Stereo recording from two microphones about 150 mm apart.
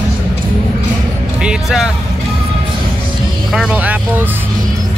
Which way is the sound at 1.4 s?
5° right (ahead or behind).